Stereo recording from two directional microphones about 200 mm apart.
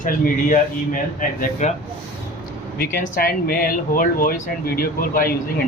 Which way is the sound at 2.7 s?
45° left (ahead or behind).